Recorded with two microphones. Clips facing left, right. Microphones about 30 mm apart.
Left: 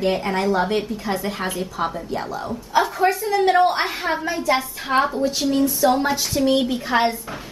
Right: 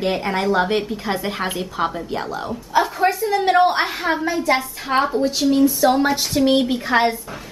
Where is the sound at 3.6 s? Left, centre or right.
Right.